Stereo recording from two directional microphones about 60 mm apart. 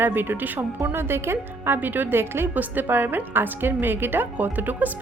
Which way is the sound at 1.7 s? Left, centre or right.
Right.